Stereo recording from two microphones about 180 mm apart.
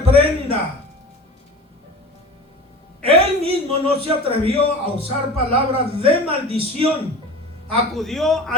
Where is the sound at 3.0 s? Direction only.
30° right (ahead or behind).